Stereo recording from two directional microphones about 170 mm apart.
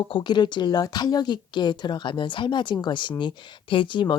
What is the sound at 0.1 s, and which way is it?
Speech, 25° left (ahead or behind).